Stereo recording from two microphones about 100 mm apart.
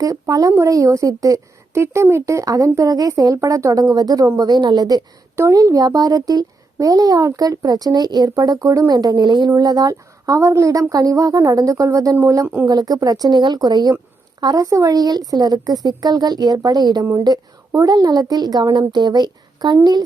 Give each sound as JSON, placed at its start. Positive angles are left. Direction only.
{"t": 0.0, "sound": "a child's voice", "side_deg": -35}
{"t": 9.5, "sound": "a child's voice", "side_deg": -40}